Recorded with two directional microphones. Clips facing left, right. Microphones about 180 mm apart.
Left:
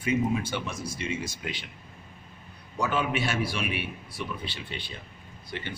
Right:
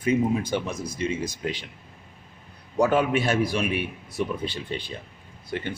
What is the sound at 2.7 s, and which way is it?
Speech, 45° right (ahead or behind).